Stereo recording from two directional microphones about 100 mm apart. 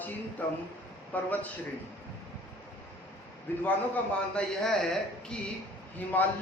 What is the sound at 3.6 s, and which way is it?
Speech, 15° left (ahead or behind).